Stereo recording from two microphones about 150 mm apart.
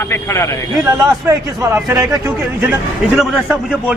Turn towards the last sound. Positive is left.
turn(degrees=-5)  # may be behind; listen again after turning